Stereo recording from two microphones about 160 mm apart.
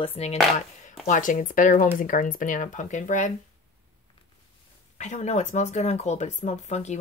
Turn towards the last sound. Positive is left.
turn(degrees=45)  # may be behind; listen again after turning